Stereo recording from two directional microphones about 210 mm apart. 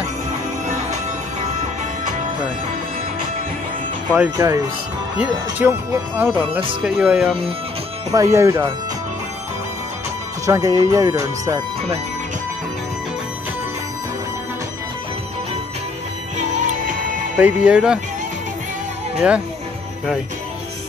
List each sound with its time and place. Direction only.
4.1 s speech: 10° right (ahead or behind)
8.1 s speech: 15° right (ahead or behind)
10.4 s speech: 15° right (ahead or behind)
16.5 s music: 40° right (ahead or behind)
17.4 s speech: 5° right (ahead or behind)